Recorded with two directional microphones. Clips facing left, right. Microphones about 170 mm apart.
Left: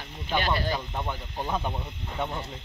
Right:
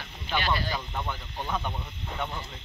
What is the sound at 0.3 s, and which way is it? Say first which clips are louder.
Speech: left 2 dB; 45° left (ahead or behind).